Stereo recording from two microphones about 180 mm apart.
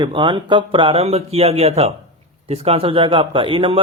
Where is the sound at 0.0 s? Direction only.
25° right (ahead or behind).